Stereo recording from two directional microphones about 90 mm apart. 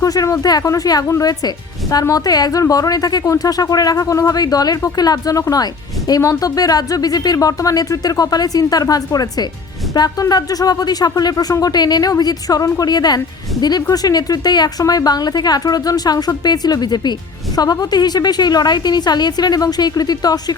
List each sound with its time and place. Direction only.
0.0 s a woman's voice: 40° left (ahead or behind)